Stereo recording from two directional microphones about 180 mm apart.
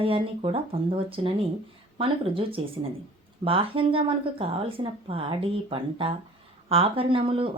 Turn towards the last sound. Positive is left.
turn(degrees=-30)  # may be behind; listen again after turning